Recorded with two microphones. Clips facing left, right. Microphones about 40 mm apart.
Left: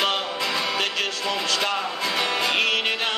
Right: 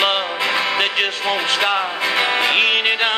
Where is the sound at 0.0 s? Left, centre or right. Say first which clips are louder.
Right 5 dB; right.